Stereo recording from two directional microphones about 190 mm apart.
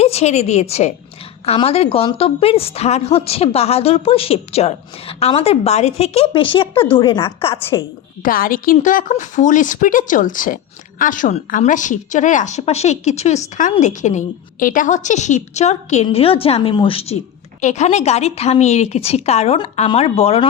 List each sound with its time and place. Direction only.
0.0 s a woman's voice: 35° left (ahead or behind)
8.2 s a woman's voice: 50° left (ahead or behind); by 20.5 s 30° left (ahead or behind)